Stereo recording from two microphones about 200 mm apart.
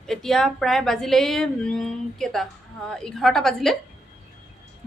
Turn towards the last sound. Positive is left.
turn(degrees=0)  # may be behind; listen again after turning